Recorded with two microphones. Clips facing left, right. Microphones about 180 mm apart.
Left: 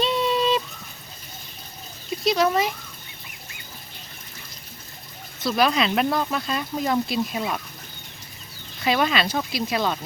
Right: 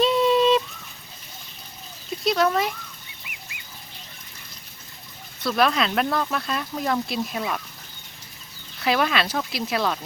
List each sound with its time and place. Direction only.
0.0 s a sound: centre (ahead or behind)
2.2 s speech: centre (ahead or behind)
5.4 s speech: centre (ahead or behind)
8.8 s speech: centre (ahead or behind)